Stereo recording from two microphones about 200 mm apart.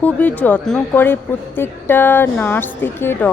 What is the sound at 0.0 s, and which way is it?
A woman's voice, 10° left (ahead or behind).